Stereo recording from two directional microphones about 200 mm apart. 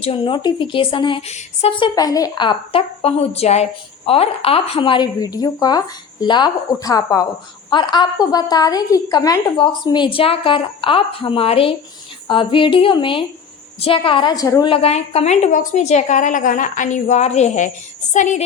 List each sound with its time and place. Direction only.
0.0 s a woman's voice: 25° left (ahead or behind)
14.7 s a woman's voice: 30° left (ahead or behind)